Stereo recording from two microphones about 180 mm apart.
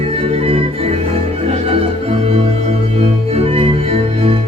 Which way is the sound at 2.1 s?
35° right (ahead or behind).